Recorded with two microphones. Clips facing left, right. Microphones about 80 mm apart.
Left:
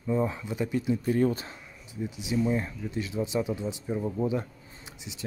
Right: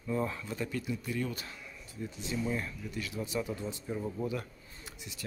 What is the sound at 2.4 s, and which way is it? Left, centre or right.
Speech, left.